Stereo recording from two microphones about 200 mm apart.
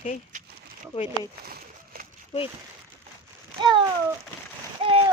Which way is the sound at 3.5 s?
25° right (ahead or behind).